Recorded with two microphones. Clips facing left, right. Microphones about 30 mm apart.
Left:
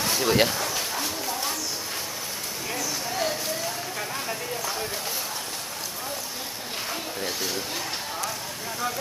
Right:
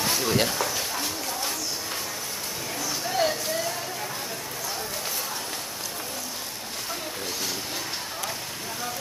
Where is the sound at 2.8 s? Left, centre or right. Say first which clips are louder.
Right 4 dB; centre.